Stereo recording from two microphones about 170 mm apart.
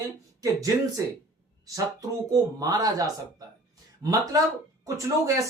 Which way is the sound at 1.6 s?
20° right (ahead or behind).